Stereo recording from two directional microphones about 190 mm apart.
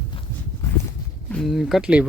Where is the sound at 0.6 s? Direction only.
15° left (ahead or behind).